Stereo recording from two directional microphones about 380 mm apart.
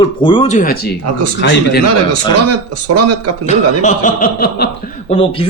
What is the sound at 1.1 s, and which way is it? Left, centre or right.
Speech, right.